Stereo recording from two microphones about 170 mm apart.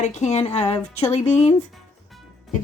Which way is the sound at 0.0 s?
45° left (ahead or behind).